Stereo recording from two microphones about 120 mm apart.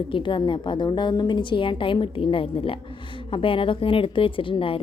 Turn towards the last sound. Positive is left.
turn(degrees=45)  # may be behind; listen again after turning